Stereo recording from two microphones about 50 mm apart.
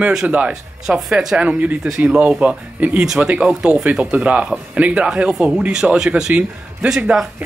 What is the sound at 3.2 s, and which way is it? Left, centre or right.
Speech, right.